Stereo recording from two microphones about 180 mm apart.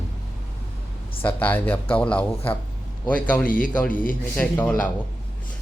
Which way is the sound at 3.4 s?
50° left (ahead or behind).